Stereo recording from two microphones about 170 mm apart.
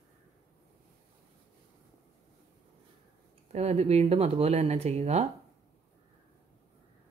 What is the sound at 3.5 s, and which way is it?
Speech, 40° right (ahead or behind).